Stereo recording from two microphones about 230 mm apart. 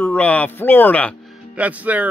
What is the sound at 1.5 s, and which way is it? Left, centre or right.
Speech, centre.